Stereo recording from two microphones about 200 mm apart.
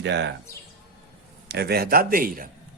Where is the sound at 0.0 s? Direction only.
60° right (ahead or behind).